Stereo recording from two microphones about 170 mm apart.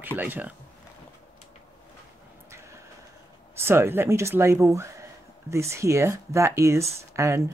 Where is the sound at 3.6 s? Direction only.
15° right (ahead or behind).